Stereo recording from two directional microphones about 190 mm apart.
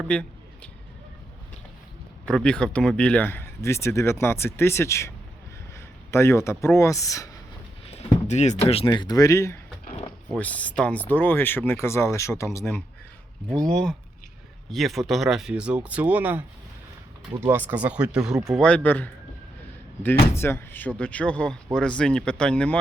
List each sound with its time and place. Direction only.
0.1 s a sound: 5° left (ahead or behind)
2.2 s speech: 5° left (ahead or behind)
7.9 s speech: 35° left (ahead or behind); by 16.4 s 10° right (ahead or behind)
17.4 s speech: 10° right (ahead or behind); by 19.1 s 10° left (ahead or behind)
20.3 s speech: 10° left (ahead or behind)